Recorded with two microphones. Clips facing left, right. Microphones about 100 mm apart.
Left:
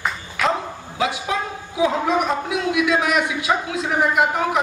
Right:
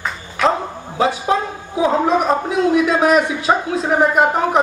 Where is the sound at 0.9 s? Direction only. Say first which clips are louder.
Right 6 dB; 35° right (ahead or behind).